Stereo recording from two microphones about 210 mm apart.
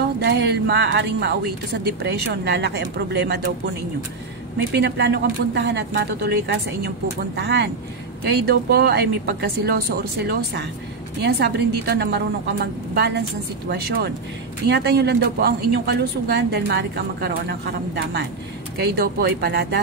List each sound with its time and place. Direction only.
0.2 s speech: 50° right (ahead or behind)
4.7 s a woman's voice: 55° right (ahead or behind)